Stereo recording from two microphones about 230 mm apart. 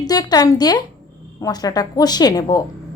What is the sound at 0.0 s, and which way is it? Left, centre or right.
A woman's voice, centre.